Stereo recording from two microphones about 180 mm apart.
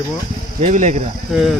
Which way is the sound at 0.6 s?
40° right (ahead or behind).